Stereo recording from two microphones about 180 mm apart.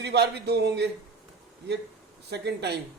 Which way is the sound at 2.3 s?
70° right (ahead or behind).